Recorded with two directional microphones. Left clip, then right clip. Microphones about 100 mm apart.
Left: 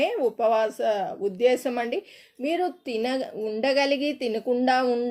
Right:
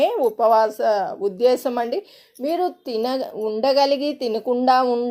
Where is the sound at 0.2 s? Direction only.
20° right (ahead or behind).